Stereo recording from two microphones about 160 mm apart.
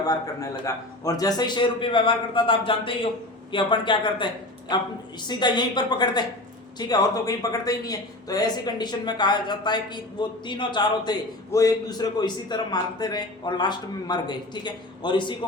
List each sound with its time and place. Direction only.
0.6 s a man's voice: 20° left (ahead or behind)
5.3 s speech: 25° left (ahead or behind)